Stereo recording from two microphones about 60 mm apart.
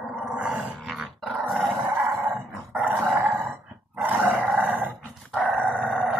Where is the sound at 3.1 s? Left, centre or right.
Right.